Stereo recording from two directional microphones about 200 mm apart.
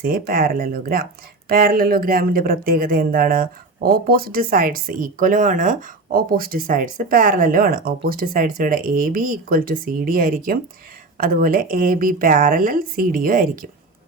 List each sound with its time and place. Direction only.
0.0 s speech: 45° right (ahead or behind)